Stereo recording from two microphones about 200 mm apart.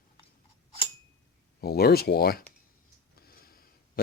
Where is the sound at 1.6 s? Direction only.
50° left (ahead or behind).